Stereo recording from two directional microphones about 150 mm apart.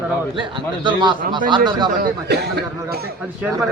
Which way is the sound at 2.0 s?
90° right.